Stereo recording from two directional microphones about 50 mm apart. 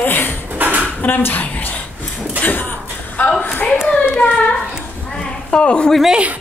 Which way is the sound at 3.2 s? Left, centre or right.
Left.